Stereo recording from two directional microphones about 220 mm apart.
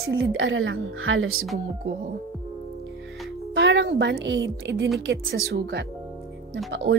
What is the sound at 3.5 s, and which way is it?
A woman's voice, 55° right (ahead or behind).